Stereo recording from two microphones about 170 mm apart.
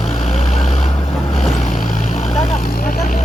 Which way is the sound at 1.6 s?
50° left (ahead or behind).